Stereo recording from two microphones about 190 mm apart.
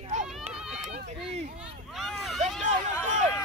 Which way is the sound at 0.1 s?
40° right (ahead or behind).